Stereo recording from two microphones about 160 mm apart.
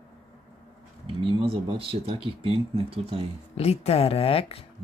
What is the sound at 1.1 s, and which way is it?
Speech, 35° right (ahead or behind).